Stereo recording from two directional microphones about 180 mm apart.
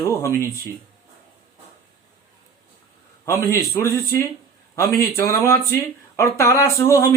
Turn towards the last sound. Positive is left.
turn(degrees=15)  # may be behind; listen again after turning